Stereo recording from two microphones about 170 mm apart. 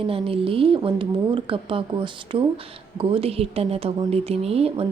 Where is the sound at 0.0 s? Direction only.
35° right (ahead or behind).